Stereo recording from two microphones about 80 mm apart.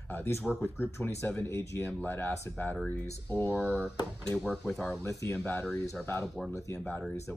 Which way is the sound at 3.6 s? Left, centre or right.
Centre.